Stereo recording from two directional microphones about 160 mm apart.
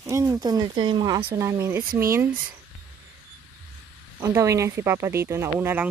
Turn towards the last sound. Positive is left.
turn(degrees=-15)  # may be behind; listen again after turning